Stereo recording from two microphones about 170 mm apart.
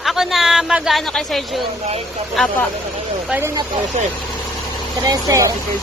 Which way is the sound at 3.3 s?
10° right (ahead or behind).